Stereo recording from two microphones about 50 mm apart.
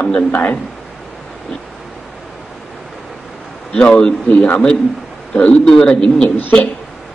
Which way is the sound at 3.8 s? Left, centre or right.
Centre.